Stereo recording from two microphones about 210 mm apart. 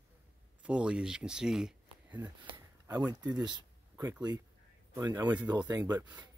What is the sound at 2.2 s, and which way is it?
Speech, 15° right (ahead or behind).